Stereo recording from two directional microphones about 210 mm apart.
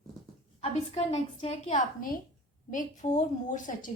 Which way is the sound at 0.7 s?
30° left (ahead or behind).